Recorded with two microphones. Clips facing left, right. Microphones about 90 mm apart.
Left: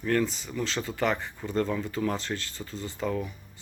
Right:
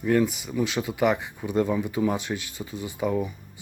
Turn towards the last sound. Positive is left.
turn(degrees=-15)  # may be behind; listen again after turning